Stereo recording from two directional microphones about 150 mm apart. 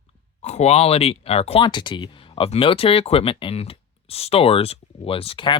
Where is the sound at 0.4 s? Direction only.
45° left (ahead or behind).